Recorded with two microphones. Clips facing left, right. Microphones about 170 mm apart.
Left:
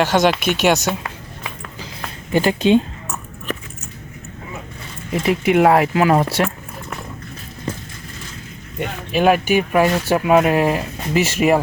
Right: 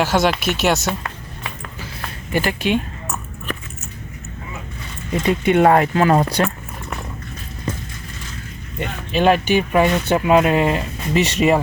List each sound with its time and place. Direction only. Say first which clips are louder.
0.0 s speech: left 2 dB; 5° right (ahead or behind)
1.0 s a sound: even; 15° left (ahead or behind)
2.3 s speech: left 5 dB; 20° left (ahead or behind)
5.1 s speech: even; 5° left (ahead or behind)
8.8 s speech: left 1 dB; 10° left (ahead or behind)